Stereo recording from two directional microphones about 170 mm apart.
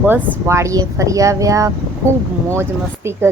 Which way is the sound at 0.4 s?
15° right (ahead or behind).